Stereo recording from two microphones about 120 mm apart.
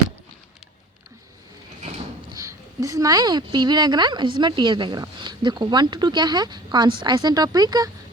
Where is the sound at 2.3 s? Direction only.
30° right (ahead or behind).